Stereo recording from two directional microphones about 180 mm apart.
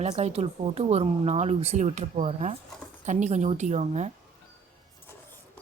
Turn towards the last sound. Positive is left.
turn(degrees=-40)  # may be behind; listen again after turning